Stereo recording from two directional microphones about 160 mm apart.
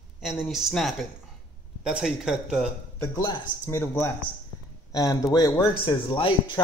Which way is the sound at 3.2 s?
30° left (ahead or behind).